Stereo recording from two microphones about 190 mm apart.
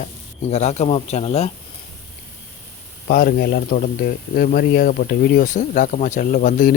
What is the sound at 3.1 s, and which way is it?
Speech, 50° left (ahead or behind).